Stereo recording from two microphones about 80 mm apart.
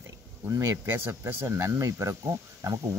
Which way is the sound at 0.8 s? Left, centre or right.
Right.